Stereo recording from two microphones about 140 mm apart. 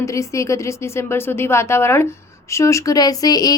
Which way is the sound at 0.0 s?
20° left (ahead or behind).